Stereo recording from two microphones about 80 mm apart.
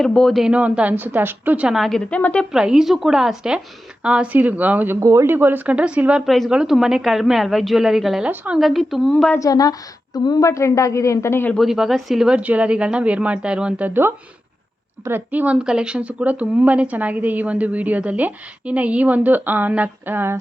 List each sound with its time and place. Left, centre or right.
0.0 s a woman's voice: centre
0.4 s a woman's voice: centre
1.6 s a woman's voice: centre
2.0 s speech: centre
2.5 s a woman's voice: centre
4.9 s speech: right
5.2 s a woman's voice: right
6.2 s a woman's voice: centre
9.4 s a woman's voice: left
11.5 s a woman's voice: centre; by 14.1 s right
15.3 s a woman's voice: centre